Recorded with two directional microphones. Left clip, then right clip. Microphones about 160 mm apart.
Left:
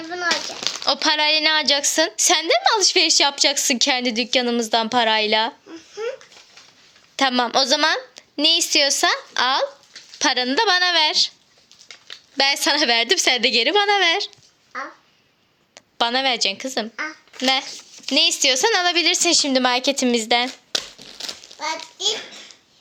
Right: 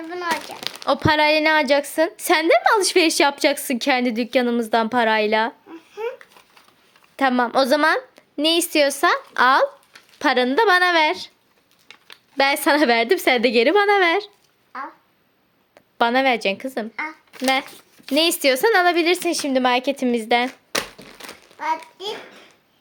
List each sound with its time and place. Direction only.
0.6 s a sound: 25° left (ahead or behind)
0.9 s a woman's voice: 15° right (ahead or behind)
7.2 s a woman's voice: 15° right (ahead or behind)
12.4 s a woman's voice: 25° right (ahead or behind)
15.7 s a woman's voice: 15° right (ahead or behind)
18.1 s speech: 30° right (ahead or behind)
18.6 s a woman's voice: 20° right (ahead or behind)